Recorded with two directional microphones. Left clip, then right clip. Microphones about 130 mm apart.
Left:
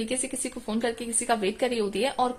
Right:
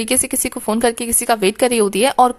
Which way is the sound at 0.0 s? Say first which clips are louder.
Right 11 dB; 40° right (ahead or behind).